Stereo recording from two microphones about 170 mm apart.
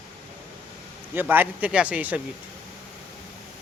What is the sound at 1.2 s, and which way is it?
A man's voice, 10° right (ahead or behind).